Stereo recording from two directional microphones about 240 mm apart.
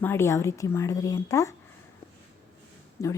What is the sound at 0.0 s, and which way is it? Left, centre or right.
A woman's voice, centre.